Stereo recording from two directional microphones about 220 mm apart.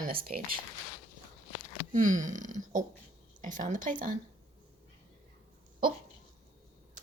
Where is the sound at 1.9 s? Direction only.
35° right (ahead or behind).